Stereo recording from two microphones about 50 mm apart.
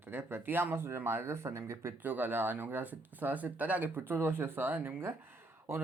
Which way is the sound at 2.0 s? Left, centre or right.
Right.